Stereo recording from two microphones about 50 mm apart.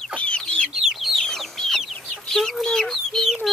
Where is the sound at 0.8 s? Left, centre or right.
Centre.